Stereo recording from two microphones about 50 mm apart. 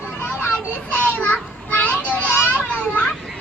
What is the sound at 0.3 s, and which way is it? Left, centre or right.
Children playing, left.